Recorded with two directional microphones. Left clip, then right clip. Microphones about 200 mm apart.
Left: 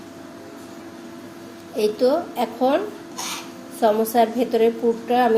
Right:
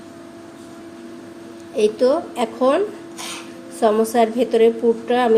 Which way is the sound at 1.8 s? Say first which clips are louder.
Right 3 dB; 30° right (ahead or behind).